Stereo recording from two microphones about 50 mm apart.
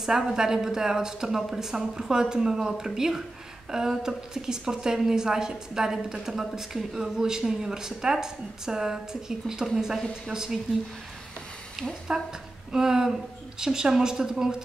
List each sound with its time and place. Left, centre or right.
0.0 s a woman's voice: centre
12.1 s a woman's voice: centre